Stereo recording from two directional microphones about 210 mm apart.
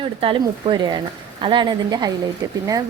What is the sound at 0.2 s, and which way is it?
A woman's voice, 25° right (ahead or behind).